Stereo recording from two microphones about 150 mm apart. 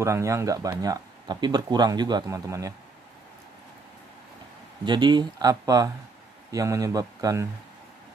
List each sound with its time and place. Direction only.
0.0 s speech: 20° right (ahead or behind)
4.8 s speech: 30° right (ahead or behind)